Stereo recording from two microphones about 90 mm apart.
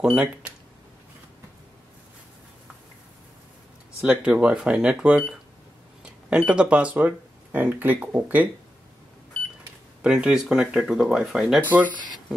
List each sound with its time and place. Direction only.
0.0 s speech: 10° right (ahead or behind)
4.0 s speech: 15° right (ahead or behind)
10.0 s speech: 10° right (ahead or behind)